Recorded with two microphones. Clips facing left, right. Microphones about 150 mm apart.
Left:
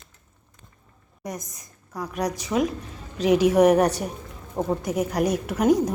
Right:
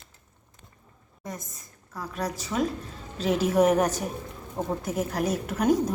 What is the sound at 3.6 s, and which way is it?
Speech, 70° left (ahead or behind).